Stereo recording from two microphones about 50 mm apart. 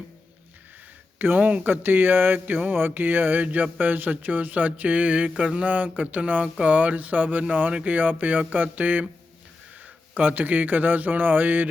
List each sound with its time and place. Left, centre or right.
1.2 s a man's voice: right